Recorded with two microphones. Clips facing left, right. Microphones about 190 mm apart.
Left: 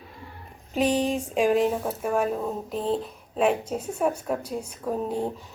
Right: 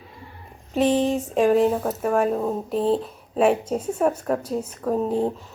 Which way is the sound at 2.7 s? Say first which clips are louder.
Right 5 dB; 35° right (ahead or behind).